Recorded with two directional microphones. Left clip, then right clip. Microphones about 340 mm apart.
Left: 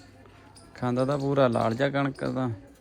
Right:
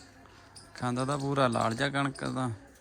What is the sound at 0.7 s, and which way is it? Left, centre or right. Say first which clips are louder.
Speech: left 5 dB; centre.